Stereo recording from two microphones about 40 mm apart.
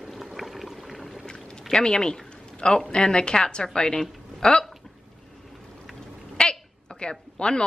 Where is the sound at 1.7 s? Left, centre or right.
Centre.